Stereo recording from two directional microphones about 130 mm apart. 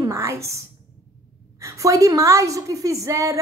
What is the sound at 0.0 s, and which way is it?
A woman's voice, 20° right (ahead or behind).